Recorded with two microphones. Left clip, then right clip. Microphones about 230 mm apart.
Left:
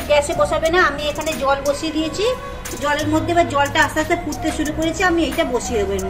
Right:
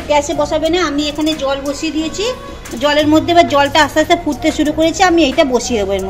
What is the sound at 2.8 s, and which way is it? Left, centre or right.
A woman's voice, right.